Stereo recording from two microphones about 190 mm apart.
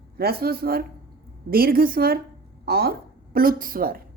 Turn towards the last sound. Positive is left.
turn(degrees=-50)  # may be behind; listen again after turning